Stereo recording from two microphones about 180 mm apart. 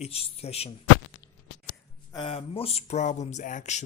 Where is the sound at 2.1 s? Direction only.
30° left (ahead or behind).